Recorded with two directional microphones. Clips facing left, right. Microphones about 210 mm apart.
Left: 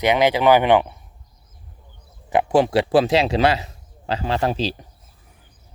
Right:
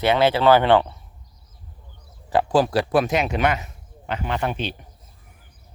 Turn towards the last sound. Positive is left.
turn(degrees=35)  # may be behind; listen again after turning